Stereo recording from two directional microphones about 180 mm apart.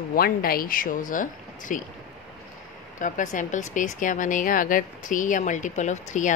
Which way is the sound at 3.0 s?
45° left (ahead or behind).